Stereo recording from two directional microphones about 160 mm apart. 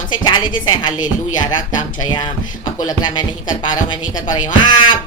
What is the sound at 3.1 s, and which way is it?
Speech, 25° left (ahead or behind).